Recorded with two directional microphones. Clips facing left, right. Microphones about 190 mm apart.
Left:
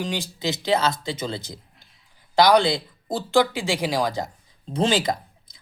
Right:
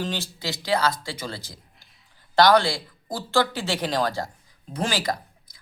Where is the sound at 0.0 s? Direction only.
15° left (ahead or behind).